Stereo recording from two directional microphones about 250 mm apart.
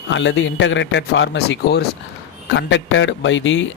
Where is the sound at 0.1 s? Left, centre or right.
Left.